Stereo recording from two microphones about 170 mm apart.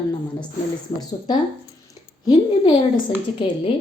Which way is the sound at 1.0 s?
25° left (ahead or behind).